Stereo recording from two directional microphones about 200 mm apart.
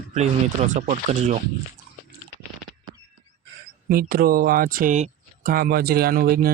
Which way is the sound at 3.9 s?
45° right (ahead or behind).